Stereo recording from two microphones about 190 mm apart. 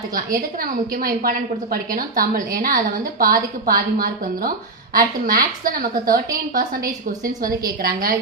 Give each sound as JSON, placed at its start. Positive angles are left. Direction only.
{"t": 0.6, "sound": "a woman's voice", "side_deg": -50}